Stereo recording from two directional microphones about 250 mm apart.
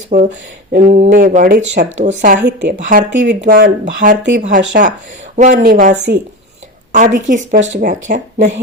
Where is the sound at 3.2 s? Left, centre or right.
Right.